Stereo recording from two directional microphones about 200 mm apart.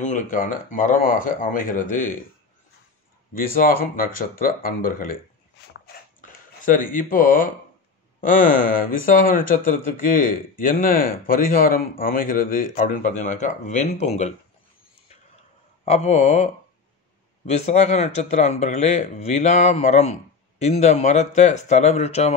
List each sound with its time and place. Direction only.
0.0 s speech: 40° left (ahead or behind)
3.3 s speech: 45° left (ahead or behind)
5.7 s a sound: 45° left (ahead or behind)
8.2 s speech: 45° left (ahead or behind)
15.8 s speech: 35° left (ahead or behind)
17.5 s speech: 35° left (ahead or behind)